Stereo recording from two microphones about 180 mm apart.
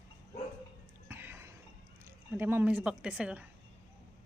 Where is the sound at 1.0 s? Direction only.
10° right (ahead or behind).